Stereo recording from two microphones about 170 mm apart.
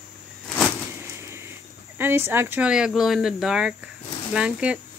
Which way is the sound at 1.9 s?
15° right (ahead or behind).